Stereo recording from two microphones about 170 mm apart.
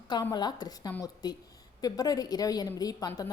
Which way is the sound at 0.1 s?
25° left (ahead or behind).